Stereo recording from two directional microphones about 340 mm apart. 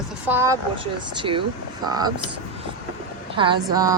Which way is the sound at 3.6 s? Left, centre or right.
Centre.